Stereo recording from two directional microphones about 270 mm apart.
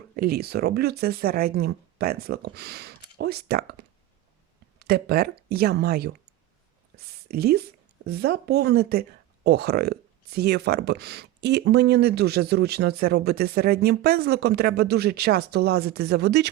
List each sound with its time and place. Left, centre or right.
0.2 s speech: right
4.8 s speech: right